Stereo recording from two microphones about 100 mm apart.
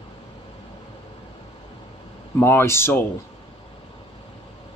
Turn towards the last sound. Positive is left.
turn(degrees=25)  # may be behind; listen again after turning